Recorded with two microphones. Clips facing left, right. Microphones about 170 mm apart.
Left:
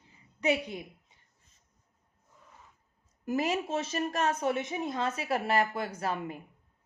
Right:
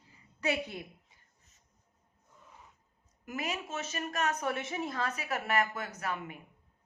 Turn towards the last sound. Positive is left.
turn(degrees=30)  # may be behind; listen again after turning